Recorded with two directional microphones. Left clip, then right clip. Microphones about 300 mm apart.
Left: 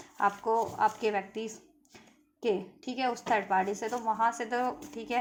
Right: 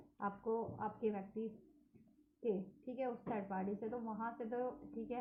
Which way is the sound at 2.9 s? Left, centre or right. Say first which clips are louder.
Left 14 dB; left.